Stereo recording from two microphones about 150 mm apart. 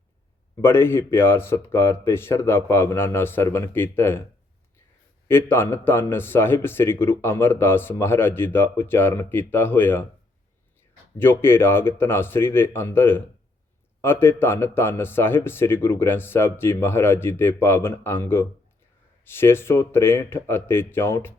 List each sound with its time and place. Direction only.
0.6 s a man's voice: 15° left (ahead or behind)
5.3 s a man's voice: 15° left (ahead or behind)
11.2 s a man's voice: 15° left (ahead or behind)